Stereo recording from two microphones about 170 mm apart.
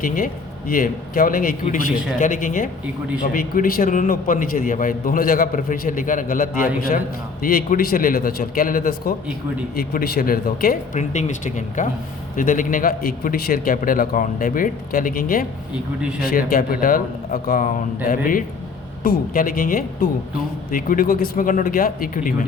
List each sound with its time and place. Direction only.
0.7 s a man's voice: 55° left (ahead or behind)